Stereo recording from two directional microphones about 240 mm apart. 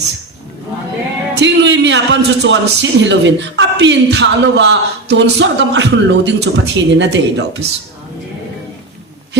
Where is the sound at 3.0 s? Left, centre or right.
Right.